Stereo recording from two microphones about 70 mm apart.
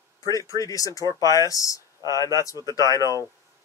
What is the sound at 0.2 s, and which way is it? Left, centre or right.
Speech, left.